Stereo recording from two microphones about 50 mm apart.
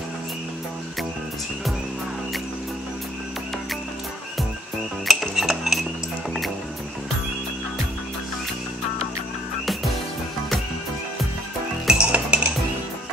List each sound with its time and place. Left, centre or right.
5.0 s cutlery: centre
11.9 s music: right